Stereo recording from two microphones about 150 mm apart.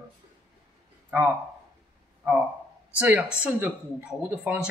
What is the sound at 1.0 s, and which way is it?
Speech, 10° right (ahead or behind).